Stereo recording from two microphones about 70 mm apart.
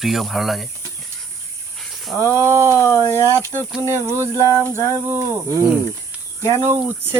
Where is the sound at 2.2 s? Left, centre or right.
Right.